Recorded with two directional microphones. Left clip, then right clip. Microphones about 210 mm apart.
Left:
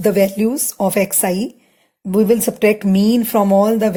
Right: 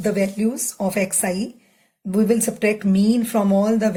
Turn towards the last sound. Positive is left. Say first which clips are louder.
# left 6 dB
turn(degrees=35)  # may be behind; listen again after turning